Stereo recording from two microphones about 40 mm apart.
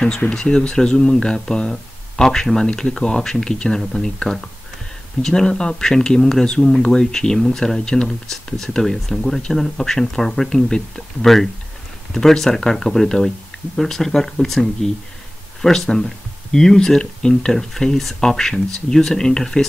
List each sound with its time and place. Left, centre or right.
0.3 s speech: left